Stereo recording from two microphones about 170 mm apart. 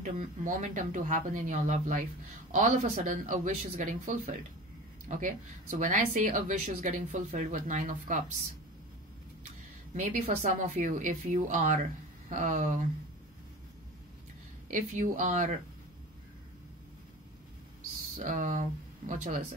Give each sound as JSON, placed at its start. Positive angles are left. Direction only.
{"t": 0.0, "sound": "speech", "side_deg": -45}
{"t": 9.9, "sound": "speech", "side_deg": -50}
{"t": 14.7, "sound": "speech", "side_deg": -45}
{"t": 18.2, "sound": "speech", "side_deg": -50}